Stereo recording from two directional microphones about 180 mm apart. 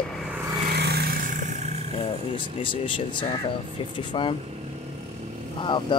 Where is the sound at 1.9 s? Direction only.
30° left (ahead or behind).